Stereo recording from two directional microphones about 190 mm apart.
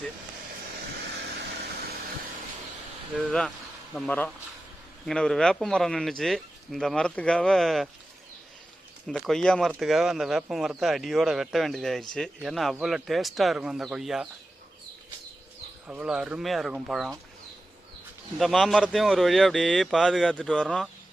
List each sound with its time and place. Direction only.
3.2 s speech: centre (ahead or behind)
9.0 s speech: centre (ahead or behind)
15.9 s speech: 5° right (ahead or behind)
18.3 s speech: centre (ahead or behind)